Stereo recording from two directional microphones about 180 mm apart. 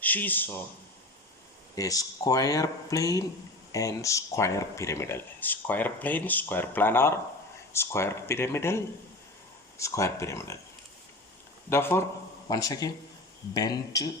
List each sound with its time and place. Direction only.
0.0 s speech: 10° left (ahead or behind)
1.7 s speech: 20° left (ahead or behind)
11.7 s speech: 15° left (ahead or behind)